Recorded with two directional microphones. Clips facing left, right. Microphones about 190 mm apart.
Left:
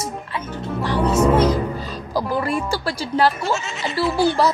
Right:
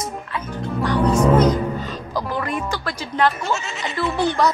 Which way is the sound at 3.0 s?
35° left (ahead or behind).